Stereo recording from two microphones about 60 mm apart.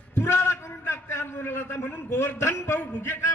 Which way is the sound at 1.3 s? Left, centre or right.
Left.